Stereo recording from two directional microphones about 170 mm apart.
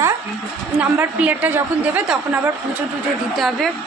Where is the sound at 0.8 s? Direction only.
10° right (ahead or behind).